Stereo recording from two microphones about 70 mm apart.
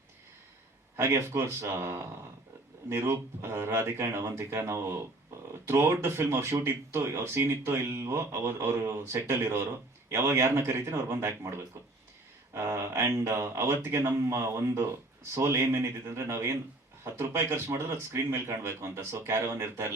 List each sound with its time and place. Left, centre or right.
0.9 s speech: right
12.5 s speech: right